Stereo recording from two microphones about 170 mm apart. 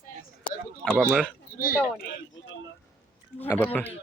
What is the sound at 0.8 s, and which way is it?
Speech, 5° left (ahead or behind).